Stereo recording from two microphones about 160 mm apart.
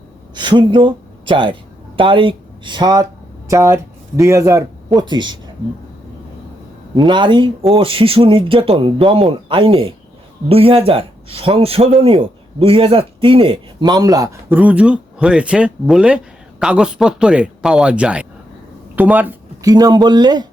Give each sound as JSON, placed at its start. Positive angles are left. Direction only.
{"t": 0.3, "sound": "speech", "side_deg": -30}
{"t": 6.9, "sound": "speech", "side_deg": -30}
{"t": 14.5, "sound": "speech", "side_deg": -10}
{"t": 19.6, "sound": "speech", "side_deg": -25}